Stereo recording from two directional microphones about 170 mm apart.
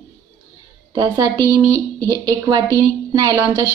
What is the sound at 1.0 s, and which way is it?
A woman's voice, 20° right (ahead or behind).